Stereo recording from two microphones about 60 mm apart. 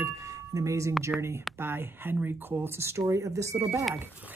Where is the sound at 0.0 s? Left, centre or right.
Right.